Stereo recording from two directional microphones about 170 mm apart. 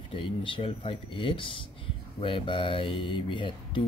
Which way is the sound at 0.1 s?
30° left (ahead or behind).